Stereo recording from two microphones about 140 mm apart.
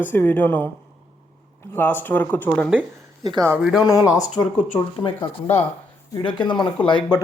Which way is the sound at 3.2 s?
30° right (ahead or behind).